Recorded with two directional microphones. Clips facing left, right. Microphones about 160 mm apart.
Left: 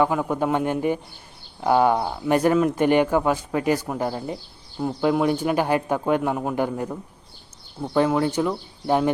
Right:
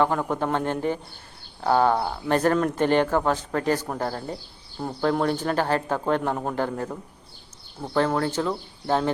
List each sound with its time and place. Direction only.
0.0 s speech: 10° left (ahead or behind)